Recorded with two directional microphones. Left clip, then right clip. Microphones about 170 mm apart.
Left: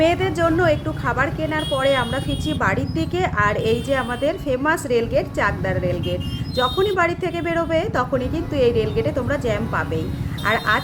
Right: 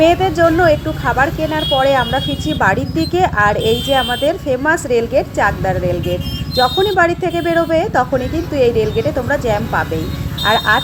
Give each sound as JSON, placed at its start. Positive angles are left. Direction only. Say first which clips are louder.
{"t": 0.0, "sound": "speech", "louder": "right 7 dB", "side_deg": -20}